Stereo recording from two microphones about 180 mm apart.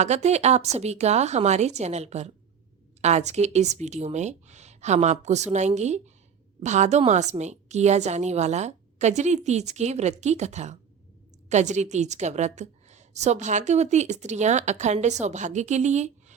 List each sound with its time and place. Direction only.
0.0 s a woman's voice: 40° right (ahead or behind)